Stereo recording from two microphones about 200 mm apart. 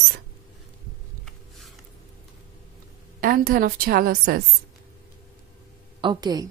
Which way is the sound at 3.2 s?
45° right (ahead or behind).